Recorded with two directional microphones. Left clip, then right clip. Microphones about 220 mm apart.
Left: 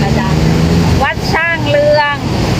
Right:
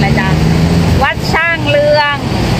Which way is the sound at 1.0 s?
5° right (ahead or behind).